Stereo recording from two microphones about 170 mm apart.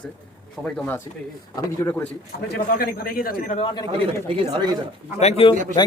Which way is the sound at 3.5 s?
30° left (ahead or behind).